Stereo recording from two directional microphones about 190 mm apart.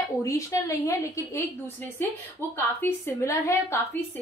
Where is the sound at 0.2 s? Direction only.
15° left (ahead or behind).